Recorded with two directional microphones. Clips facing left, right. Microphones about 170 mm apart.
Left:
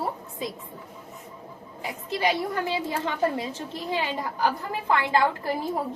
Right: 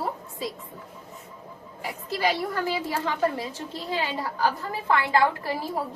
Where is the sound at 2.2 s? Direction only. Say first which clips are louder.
Even; 20° left (ahead or behind).